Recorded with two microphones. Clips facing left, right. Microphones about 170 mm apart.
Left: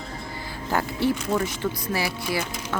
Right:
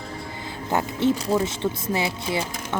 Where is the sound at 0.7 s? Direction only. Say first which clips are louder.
Right 2 dB; 20° right (ahead or behind).